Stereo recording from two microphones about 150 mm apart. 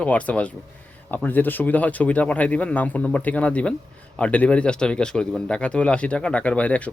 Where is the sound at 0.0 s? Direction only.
10° left (ahead or behind).